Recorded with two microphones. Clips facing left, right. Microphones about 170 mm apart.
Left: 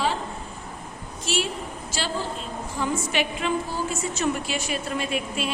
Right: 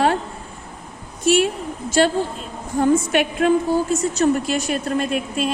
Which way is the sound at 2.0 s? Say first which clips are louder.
Right 11 dB; 55° right (ahead or behind).